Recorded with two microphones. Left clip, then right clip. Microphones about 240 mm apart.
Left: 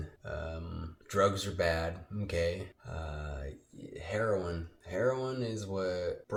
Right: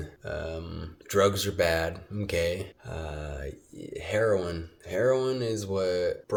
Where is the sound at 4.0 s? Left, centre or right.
Right.